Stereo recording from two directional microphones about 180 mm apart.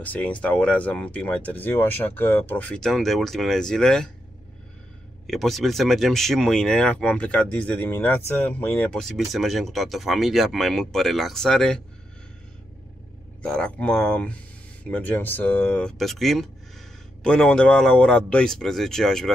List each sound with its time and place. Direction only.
0.0 s speech: 10° left (ahead or behind)
5.2 s speech: centre (ahead or behind)
13.4 s speech: 5° left (ahead or behind)